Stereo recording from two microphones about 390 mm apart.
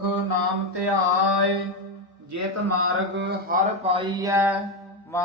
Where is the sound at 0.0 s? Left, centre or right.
Right.